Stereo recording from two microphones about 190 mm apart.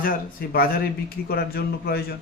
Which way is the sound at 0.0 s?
50° left (ahead or behind).